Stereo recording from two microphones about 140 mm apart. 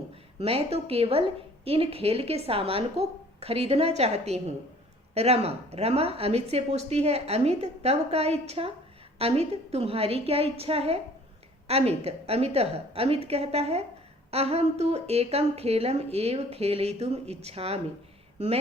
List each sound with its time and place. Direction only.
0.3 s a woman's voice: 45° right (ahead or behind)